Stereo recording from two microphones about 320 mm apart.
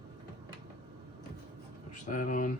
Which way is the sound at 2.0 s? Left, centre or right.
Left.